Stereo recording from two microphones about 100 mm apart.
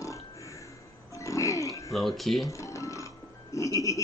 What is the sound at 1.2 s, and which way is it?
Music, 30° left (ahead or behind).